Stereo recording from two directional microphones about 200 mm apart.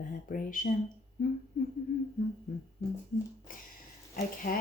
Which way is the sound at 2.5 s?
40° left (ahead or behind).